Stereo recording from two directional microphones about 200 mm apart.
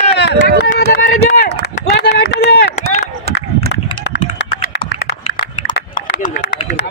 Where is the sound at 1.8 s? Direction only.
50° left (ahead or behind).